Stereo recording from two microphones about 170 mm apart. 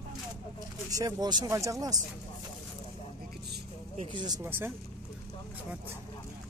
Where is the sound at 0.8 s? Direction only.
20° right (ahead or behind).